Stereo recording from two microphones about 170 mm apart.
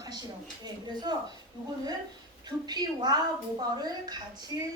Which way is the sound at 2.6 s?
25° right (ahead or behind).